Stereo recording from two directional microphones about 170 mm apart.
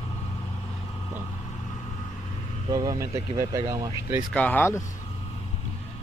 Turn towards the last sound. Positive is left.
turn(degrees=15)  # may be behind; listen again after turning